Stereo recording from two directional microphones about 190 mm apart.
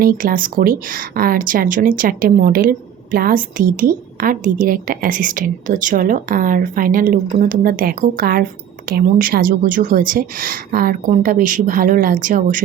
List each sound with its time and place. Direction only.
0.0 s speech: 50° right (ahead or behind)